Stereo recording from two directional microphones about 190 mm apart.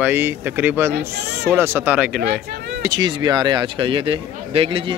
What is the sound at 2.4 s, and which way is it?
Speech, 60° right (ahead or behind).